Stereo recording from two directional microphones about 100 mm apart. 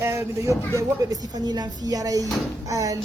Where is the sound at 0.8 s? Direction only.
40° right (ahead or behind).